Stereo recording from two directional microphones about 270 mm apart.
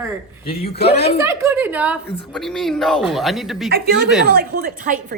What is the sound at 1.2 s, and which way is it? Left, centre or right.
A woman's voice, centre.